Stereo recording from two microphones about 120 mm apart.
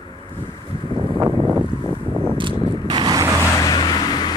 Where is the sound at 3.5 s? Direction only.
35° left (ahead or behind).